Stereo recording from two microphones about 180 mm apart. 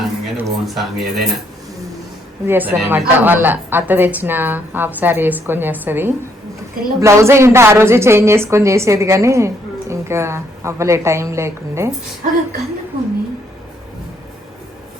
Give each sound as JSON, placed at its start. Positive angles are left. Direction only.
{"t": 0.3, "sound": "speech", "side_deg": 0}
{"t": 2.5, "sound": "a woman's voice", "side_deg": -10}
{"t": 12.2, "sound": "speech", "side_deg": -45}